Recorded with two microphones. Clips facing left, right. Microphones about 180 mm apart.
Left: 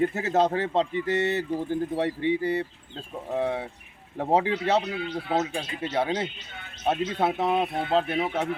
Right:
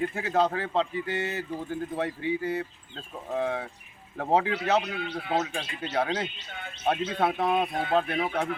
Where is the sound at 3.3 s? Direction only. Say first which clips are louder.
Left 2 dB; 20° left (ahead or behind).